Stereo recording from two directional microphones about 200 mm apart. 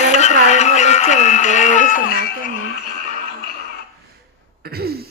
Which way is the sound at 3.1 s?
40° left (ahead or behind).